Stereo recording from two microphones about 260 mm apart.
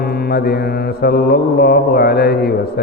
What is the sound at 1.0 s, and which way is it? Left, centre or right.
Mantra, left.